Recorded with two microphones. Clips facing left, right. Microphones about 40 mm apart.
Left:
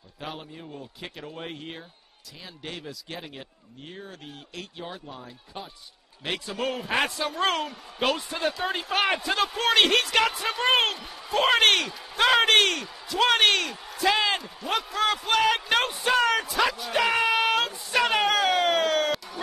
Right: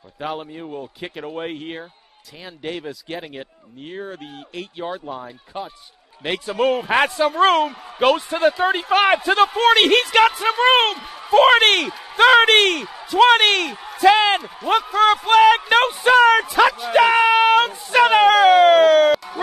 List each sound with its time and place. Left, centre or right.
0.2 s speech: right
9.4 s a man's voice: centre